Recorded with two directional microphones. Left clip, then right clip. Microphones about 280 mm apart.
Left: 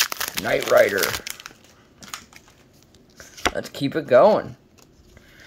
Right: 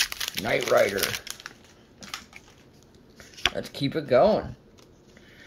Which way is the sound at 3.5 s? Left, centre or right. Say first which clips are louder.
Left 4 dB; centre.